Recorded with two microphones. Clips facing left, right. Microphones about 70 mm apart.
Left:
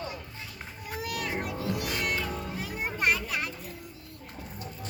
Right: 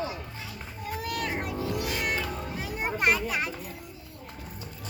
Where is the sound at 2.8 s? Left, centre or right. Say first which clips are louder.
Right 2 dB; centre.